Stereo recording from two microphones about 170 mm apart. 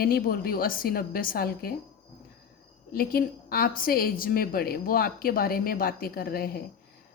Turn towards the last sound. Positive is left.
turn(degrees=60)  # may be behind; listen again after turning